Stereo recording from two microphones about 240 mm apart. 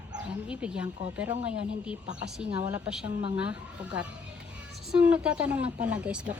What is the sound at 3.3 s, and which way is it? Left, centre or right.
A woman's voice, centre.